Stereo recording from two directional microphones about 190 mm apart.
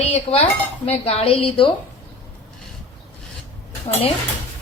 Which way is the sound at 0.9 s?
30° left (ahead or behind).